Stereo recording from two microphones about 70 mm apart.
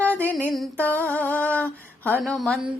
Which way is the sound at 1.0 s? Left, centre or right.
Left.